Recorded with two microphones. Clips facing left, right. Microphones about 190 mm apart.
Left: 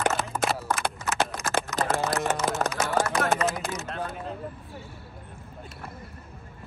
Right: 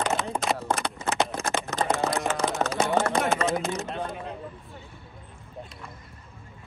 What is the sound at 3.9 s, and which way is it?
Speech, centre (ahead or behind).